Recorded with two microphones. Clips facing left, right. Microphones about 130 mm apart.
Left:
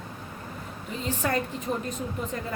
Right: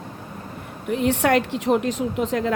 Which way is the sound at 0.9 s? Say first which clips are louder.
Right 10 dB; 70° right (ahead or behind).